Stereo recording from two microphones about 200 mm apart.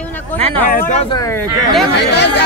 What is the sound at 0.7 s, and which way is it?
Speech, 40° left (ahead or behind).